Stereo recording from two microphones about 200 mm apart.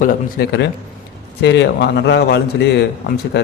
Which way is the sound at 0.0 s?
55° left (ahead or behind).